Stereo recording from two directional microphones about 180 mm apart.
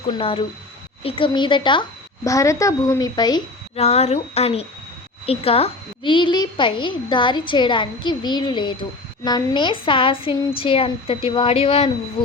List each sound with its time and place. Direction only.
0.1 s a child's voice: 30° left (ahead or behind)
3.8 s a woman's voice: 35° left (ahead or behind)